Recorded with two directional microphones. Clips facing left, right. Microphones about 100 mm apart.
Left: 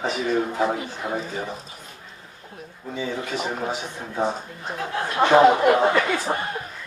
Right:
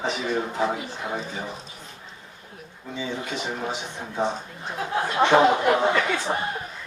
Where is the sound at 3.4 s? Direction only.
5° left (ahead or behind).